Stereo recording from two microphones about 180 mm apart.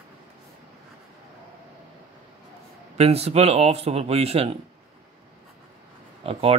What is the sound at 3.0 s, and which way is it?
Speech, 35° right (ahead or behind).